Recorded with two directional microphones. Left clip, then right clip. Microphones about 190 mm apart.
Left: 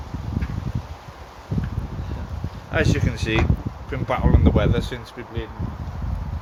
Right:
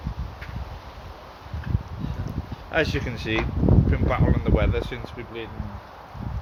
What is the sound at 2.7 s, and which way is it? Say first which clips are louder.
Speech: left 1 dB; 10° right (ahead or behind).